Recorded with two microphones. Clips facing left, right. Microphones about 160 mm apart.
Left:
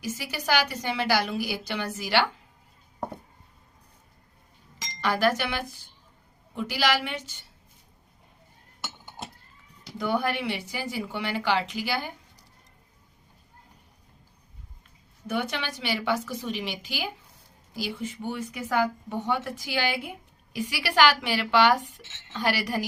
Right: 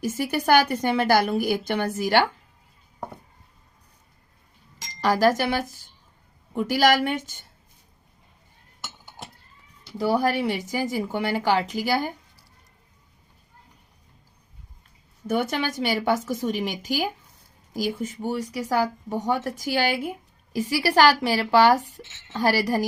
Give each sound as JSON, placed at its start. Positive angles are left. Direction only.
{"t": 0.0, "sound": "a woman's voice", "side_deg": -50}
{"t": 4.9, "sound": "a woman's voice", "side_deg": -40}
{"t": 10.0, "sound": "a woman's voice", "side_deg": -35}
{"t": 15.3, "sound": "a woman's voice", "side_deg": -45}